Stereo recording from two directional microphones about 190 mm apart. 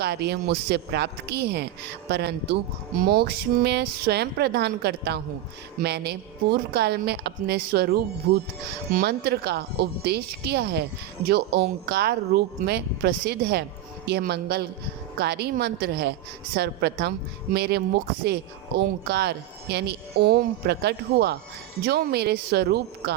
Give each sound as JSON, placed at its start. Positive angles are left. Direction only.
{"t": 0.0, "sound": "a woman's voice", "side_deg": -60}